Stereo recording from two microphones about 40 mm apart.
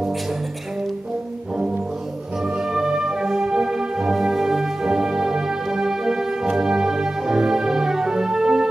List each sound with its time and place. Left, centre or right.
2.4 s music: centre